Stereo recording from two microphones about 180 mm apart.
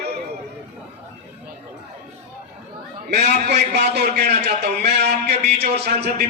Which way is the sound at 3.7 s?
65° right (ahead or behind).